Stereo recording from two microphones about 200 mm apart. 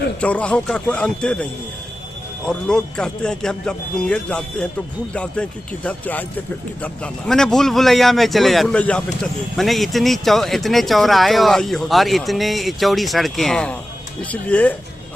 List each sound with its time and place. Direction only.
0.2 s speech: 5° left (ahead or behind)
2.5 s speech: 5° left (ahead or behind)